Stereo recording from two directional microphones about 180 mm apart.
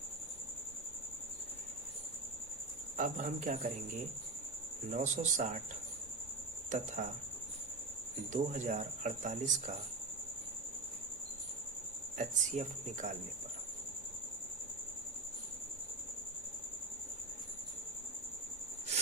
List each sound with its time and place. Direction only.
3.0 s speech: 50° right (ahead or behind)
4.9 s speech: 45° right (ahead or behind)
6.7 s speech: 45° right (ahead or behind)
8.3 s speech: 45° right (ahead or behind)
12.1 s speech: 45° right (ahead or behind)